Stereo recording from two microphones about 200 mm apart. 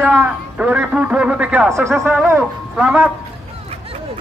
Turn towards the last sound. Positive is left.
turn(degrees=-5)  # may be behind; listen again after turning